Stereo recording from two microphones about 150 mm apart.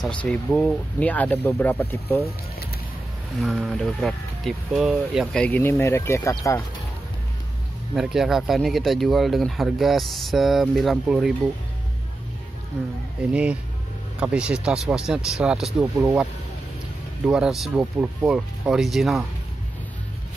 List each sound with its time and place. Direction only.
0.0 s speech: 10° left (ahead or behind)
3.3 s speech: centre (ahead or behind); by 6.6 s 20° left (ahead or behind)
7.9 s speech: centre (ahead or behind)
13.3 s speech: 5° right (ahead or behind)
15.8 s speech: 25° right (ahead or behind)
17.2 s speech: 5° right (ahead or behind)